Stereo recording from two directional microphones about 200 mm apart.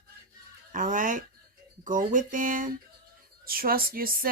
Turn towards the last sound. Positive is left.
turn(degrees=-45)  # may be behind; listen again after turning